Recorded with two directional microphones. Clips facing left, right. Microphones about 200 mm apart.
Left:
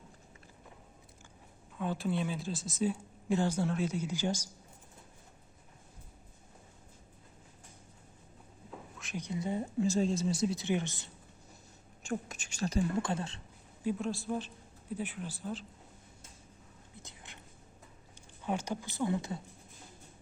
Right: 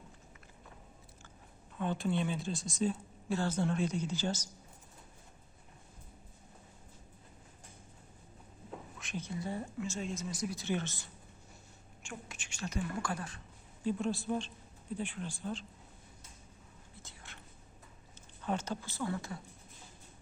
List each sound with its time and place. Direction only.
1.8 s speech: 5° left (ahead or behind)
9.1 s speech: 20° left (ahead or behind)
9.8 s speech: 35° left (ahead or behind); by 11.1 s 20° left (ahead or behind)
12.0 s a woman's voice: 40° left (ahead or behind)
14.0 s speech: centre (ahead or behind)
17.0 s whispering: 15° left (ahead or behind)
18.4 s speech: 15° left (ahead or behind)